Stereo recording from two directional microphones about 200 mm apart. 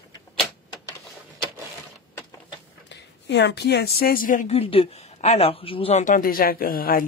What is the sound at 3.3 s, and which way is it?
Speech, 60° left (ahead or behind).